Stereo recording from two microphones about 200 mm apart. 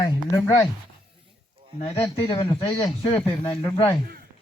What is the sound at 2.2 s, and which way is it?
Speech, 30° left (ahead or behind).